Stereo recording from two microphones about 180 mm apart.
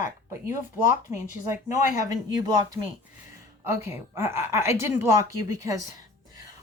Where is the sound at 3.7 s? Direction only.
15° right (ahead or behind).